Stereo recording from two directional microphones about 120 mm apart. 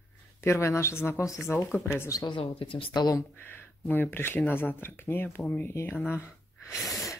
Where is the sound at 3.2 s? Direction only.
20° left (ahead or behind).